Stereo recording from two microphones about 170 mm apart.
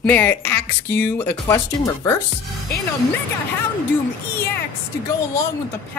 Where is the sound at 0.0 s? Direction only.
10° left (ahead or behind).